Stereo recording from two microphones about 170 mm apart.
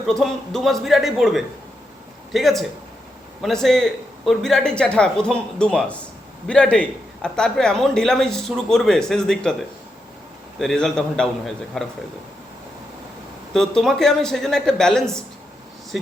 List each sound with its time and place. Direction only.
0.0 s a man's voice: centre (ahead or behind)
10.6 s a man's voice: centre (ahead or behind)
13.5 s a man's voice: 5° left (ahead or behind)